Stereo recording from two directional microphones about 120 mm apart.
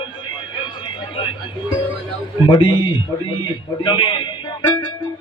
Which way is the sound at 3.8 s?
40° left (ahead or behind).